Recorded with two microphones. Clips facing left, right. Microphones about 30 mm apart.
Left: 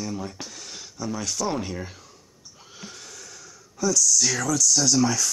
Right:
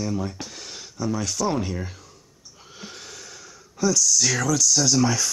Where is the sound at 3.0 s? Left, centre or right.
Right.